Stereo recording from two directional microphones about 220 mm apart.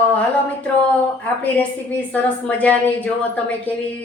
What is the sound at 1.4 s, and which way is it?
A woman's voice, 5° left (ahead or behind).